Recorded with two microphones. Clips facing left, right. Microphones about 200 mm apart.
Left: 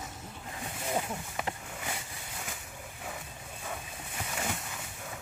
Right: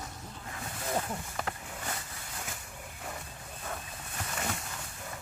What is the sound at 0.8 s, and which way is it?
Boat, 10° left (ahead or behind).